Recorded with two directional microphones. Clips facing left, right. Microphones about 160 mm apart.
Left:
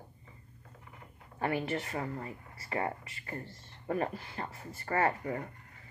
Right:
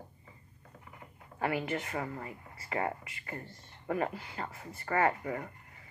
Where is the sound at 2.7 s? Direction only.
20° right (ahead or behind).